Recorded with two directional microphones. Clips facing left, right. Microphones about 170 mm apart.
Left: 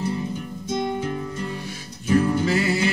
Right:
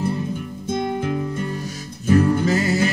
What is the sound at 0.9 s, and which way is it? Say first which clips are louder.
Music: right 4 dB; 55° right (ahead or behind).